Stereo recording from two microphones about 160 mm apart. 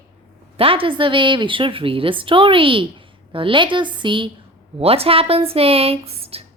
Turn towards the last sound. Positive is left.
turn(degrees=-40)  # may be behind; listen again after turning